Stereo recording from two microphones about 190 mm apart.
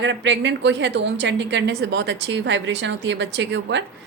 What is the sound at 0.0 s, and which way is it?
A woman's voice, 70° right (ahead or behind).